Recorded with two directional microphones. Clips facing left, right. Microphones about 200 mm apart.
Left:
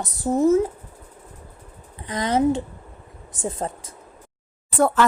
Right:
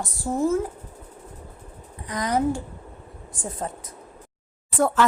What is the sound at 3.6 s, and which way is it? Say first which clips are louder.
Speech: left 2 dB; 30° left (ahead or behind).